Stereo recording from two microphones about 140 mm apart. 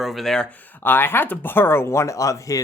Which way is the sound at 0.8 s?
15° left (ahead or behind).